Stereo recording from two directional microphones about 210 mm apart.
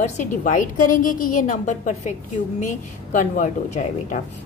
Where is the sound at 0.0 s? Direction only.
35° left (ahead or behind).